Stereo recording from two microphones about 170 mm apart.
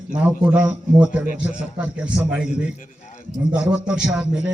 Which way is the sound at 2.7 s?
45° left (ahead or behind).